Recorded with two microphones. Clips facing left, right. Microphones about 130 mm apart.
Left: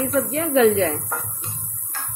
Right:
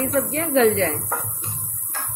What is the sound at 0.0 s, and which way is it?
Speech, centre (ahead or behind).